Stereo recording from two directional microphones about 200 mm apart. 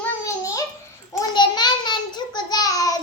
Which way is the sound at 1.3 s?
20° left (ahead or behind).